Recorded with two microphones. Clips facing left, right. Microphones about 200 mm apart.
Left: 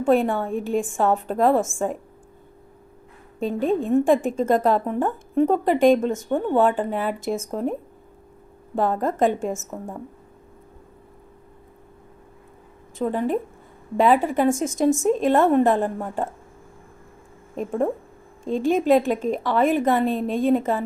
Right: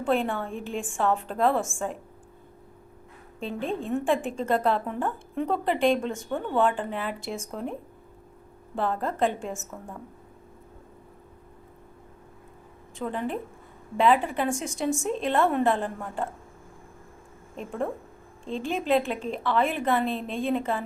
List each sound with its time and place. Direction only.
0.0 s a woman's voice: 40° left (ahead or behind)
3.4 s a woman's voice: 40° left (ahead or behind)
13.0 s a woman's voice: 40° left (ahead or behind)
17.6 s a woman's voice: 40° left (ahead or behind)